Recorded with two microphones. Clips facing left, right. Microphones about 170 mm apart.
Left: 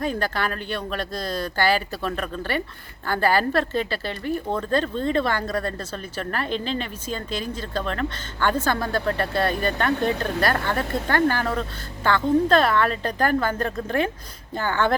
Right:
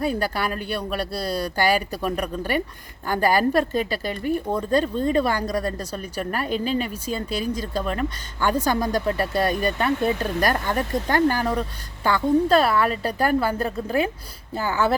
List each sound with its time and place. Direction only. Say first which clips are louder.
0.0 s speech: right 1 dB; 10° right (ahead or behind)